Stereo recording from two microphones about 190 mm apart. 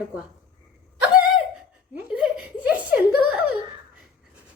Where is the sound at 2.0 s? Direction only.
5° right (ahead or behind).